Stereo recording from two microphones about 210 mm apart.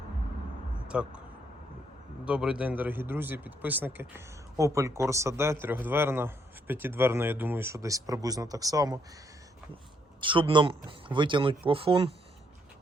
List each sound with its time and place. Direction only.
0.9 s speech: 5° right (ahead or behind)
2.2 s a man's voice: 5° right (ahead or behind)
10.2 s speech: 25° right (ahead or behind)